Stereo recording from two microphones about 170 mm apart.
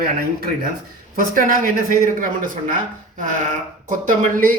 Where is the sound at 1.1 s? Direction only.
55° right (ahead or behind).